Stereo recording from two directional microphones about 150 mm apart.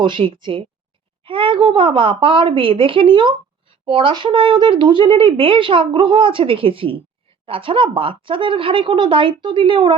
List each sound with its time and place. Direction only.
0.0 s speech: 35° right (ahead or behind)